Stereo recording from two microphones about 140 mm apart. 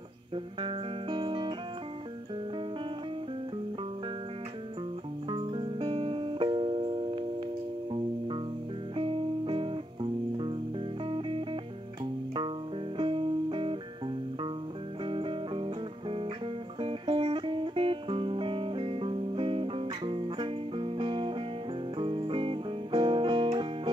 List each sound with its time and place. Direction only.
0.6 s music: 35° right (ahead or behind)
5.3 s music: 40° right (ahead or behind)
8.9 s music: 40° right (ahead or behind)
12.9 s music: 35° right (ahead or behind)
15.0 s music: 40° right (ahead or behind)